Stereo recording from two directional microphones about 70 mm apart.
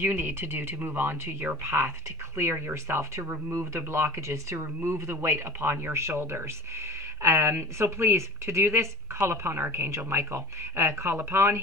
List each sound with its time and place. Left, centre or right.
0.0 s speech: right